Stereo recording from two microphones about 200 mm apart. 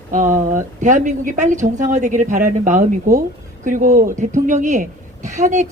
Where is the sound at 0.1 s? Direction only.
40° right (ahead or behind).